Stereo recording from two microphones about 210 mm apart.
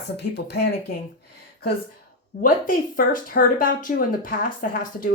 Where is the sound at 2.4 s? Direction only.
40° left (ahead or behind).